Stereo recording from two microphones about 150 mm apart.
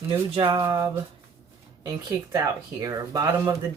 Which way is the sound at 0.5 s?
25° right (ahead or behind).